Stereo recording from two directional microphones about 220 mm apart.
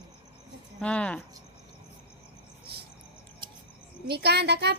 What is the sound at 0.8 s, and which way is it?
Speech, 5° left (ahead or behind).